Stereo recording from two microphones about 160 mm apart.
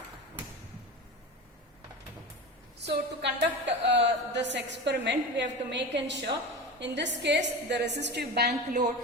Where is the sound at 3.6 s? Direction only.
90° right.